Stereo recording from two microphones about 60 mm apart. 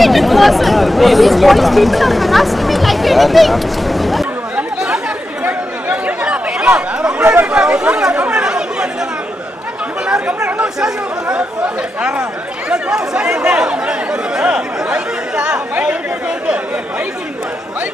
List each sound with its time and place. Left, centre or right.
0.0 s speech: centre
4.6 s chatter: centre
5.4 s chatter: right
10.0 s chatter: centre